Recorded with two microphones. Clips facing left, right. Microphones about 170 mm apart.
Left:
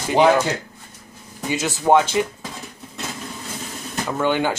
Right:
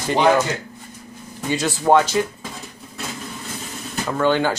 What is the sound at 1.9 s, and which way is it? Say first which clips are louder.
Speech: even; 15° left (ahead or behind).